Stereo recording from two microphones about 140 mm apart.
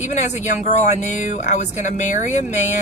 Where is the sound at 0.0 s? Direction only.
60° left (ahead or behind).